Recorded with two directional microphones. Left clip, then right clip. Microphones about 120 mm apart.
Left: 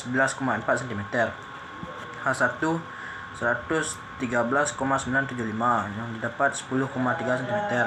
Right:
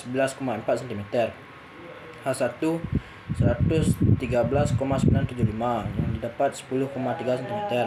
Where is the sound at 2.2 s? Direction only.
30° right (ahead or behind).